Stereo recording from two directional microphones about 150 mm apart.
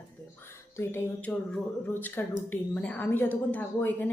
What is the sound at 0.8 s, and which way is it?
A woman's voice, 10° left (ahead or behind).